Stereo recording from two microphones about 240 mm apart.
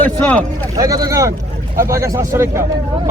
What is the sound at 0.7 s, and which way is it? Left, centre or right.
Speech, centre.